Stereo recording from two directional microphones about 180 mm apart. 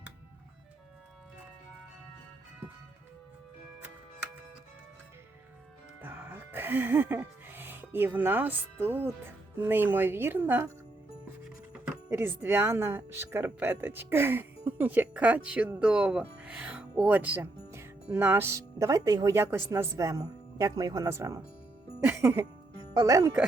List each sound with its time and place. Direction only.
6.0 s speech: 10° right (ahead or behind)
11.7 s speech: 5° right (ahead or behind)